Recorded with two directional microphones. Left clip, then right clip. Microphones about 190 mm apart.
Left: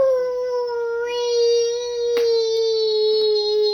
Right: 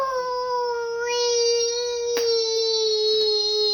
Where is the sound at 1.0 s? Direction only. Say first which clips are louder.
Left 2 dB; 20° right (ahead or behind).